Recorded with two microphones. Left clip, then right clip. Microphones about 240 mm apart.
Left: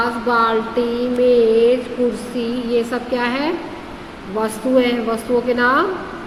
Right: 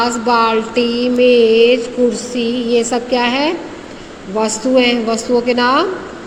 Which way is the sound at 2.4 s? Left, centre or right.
Right.